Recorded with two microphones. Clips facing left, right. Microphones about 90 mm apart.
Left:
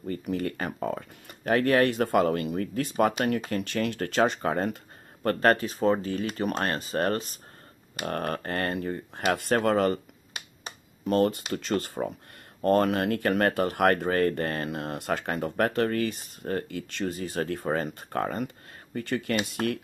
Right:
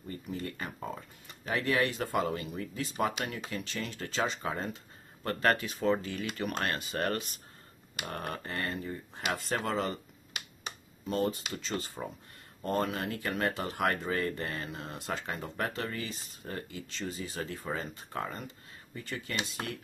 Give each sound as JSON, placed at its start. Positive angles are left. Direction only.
{"t": 0.1, "sound": "speech", "side_deg": 70}
{"t": 5.2, "sound": "speech", "side_deg": 45}
{"t": 8.0, "sound": "speech", "side_deg": 55}
{"t": 11.1, "sound": "speech", "side_deg": 60}